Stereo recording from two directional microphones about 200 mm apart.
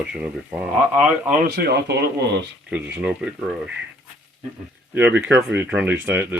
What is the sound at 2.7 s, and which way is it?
Speech, 5° right (ahead or behind).